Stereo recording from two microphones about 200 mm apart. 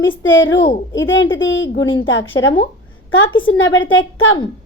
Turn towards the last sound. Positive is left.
turn(degrees=75)  # may be behind; listen again after turning